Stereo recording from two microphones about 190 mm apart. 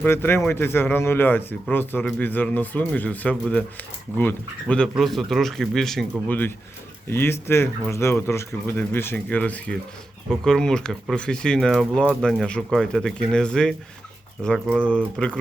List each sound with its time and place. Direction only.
0.0 s speech: 10° left (ahead or behind)